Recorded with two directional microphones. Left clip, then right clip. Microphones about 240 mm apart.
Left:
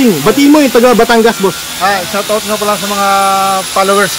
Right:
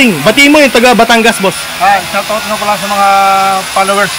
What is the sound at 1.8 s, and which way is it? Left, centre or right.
Speech, centre.